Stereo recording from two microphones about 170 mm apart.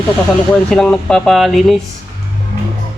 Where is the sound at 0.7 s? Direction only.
5° left (ahead or behind).